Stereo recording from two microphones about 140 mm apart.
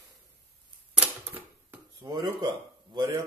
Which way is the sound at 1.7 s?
20° right (ahead or behind).